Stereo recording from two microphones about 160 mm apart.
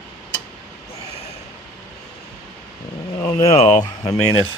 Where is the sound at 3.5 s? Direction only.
40° left (ahead or behind).